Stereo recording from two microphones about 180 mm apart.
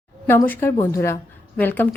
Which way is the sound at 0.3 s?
10° left (ahead or behind).